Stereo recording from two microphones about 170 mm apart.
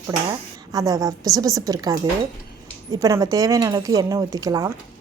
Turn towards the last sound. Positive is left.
turn(degrees=-20)  # may be behind; listen again after turning